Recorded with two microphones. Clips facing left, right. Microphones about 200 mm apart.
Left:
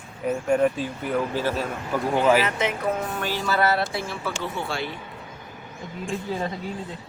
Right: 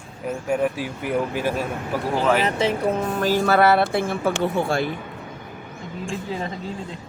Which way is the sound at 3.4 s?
60° right (ahead or behind).